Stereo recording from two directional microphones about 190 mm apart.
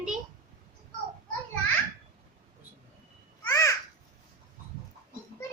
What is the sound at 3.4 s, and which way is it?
Babbling, 15° left (ahead or behind).